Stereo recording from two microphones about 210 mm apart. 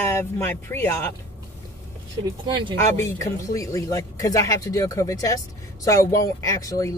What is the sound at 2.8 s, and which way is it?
Speech, 15° left (ahead or behind).